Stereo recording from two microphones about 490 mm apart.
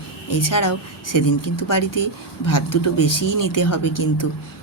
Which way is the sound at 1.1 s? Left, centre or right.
Left.